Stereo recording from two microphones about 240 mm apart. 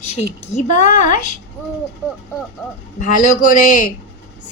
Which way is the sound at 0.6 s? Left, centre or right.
Left.